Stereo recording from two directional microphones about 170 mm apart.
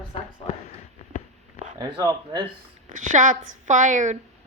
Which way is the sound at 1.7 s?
20° right (ahead or behind).